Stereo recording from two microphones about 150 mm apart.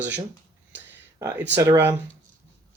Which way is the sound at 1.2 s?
20° right (ahead or behind).